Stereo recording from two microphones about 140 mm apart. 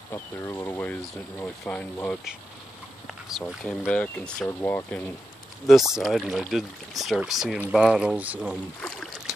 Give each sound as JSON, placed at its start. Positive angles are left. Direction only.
{"t": 0.1, "sound": "speech", "side_deg": 20}
{"t": 3.3, "sound": "speech", "side_deg": 0}
{"t": 5.7, "sound": "speech", "side_deg": -5}
{"t": 8.8, "sound": "boat", "side_deg": 5}